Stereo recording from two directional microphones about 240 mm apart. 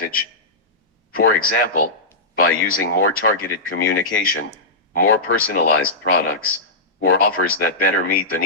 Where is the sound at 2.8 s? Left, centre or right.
Left.